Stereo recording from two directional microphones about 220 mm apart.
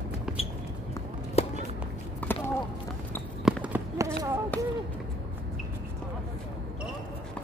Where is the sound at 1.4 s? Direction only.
30° left (ahead or behind).